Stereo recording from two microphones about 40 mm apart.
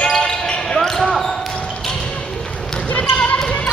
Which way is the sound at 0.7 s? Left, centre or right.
Centre.